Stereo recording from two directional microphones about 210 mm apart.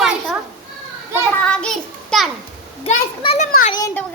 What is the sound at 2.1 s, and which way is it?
Speech, 5° left (ahead or behind).